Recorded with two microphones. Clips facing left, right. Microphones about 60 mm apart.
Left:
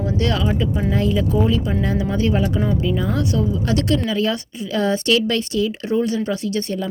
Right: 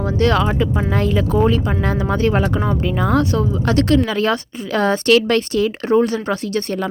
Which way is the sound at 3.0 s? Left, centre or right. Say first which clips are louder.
Right 4 dB; right.